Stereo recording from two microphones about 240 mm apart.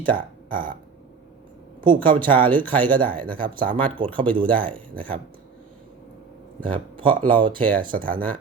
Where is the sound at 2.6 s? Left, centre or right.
Centre.